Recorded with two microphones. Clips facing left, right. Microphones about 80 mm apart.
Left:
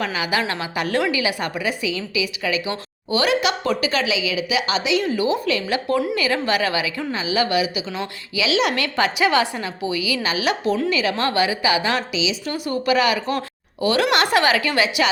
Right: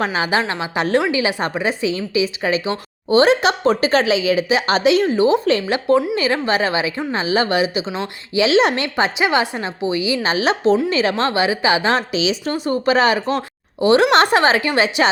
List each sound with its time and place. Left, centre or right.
0.0 s a woman's voice: right
7.1 s a woman's voice: right
12.1 s a woman's voice: right
12.5 s a woman's voice: right